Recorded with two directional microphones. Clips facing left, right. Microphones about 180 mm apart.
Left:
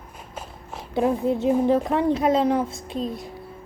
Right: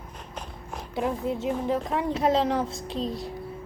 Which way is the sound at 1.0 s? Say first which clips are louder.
Left 6 dB; 25° left (ahead or behind).